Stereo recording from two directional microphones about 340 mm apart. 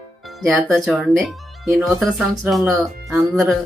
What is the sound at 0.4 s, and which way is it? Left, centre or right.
Speech, centre.